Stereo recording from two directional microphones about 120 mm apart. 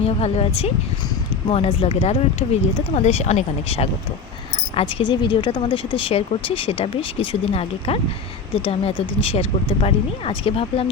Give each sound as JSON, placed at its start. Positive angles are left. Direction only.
{"t": 0.0, "sound": "speech", "side_deg": 60}
{"t": 4.7, "sound": "speech", "side_deg": 55}